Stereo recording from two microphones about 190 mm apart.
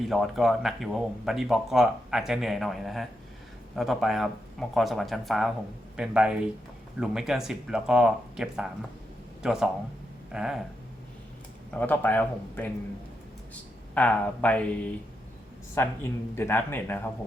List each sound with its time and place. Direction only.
0.1 s speech: centre (ahead or behind)
11.7 s speech: 10° left (ahead or behind)